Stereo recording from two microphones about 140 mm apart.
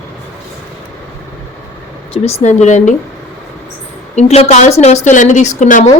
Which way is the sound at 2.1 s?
45° left (ahead or behind).